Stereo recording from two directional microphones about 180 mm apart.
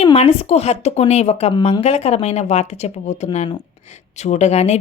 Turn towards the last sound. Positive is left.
turn(degrees=35)  # may be behind; listen again after turning